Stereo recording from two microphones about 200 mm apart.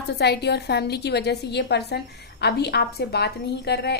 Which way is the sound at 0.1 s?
55° left (ahead or behind).